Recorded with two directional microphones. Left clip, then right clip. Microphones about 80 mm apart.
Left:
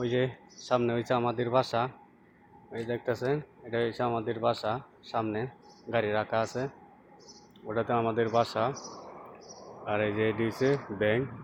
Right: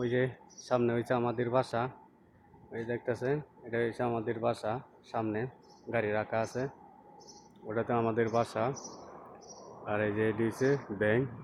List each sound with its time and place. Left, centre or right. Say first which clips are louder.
0.0 s speech: left 2 dB; centre
7.7 s speech: left 3 dB; right
9.8 s speech: left 2 dB; centre